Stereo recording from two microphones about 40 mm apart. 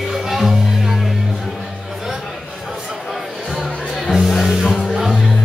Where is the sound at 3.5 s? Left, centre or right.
Centre.